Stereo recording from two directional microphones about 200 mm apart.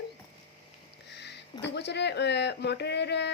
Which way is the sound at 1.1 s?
60° left (ahead or behind).